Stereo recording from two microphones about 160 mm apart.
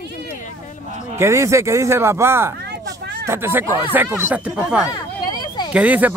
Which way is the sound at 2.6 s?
90° right.